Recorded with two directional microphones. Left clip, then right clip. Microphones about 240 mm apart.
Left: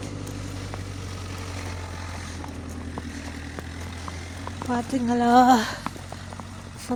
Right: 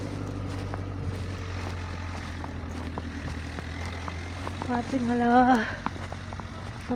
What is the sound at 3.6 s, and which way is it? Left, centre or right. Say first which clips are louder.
Vehicle: right 1 dB; left.